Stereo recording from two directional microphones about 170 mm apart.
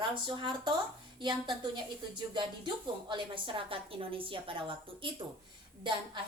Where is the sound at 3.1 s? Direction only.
30° right (ahead or behind).